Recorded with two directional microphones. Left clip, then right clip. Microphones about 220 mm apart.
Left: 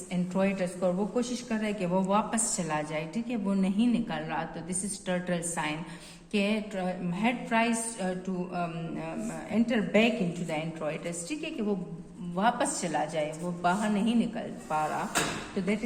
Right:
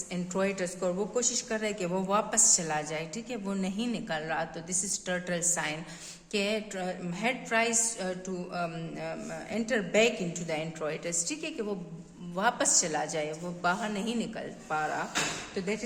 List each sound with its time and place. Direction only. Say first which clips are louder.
0.1 s a woman's voice: left 1 dB; 50° right (ahead or behind)